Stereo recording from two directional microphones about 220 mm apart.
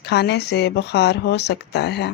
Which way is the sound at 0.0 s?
50° left (ahead or behind).